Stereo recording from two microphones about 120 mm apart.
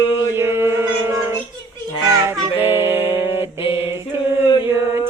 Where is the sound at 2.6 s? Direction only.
20° right (ahead or behind).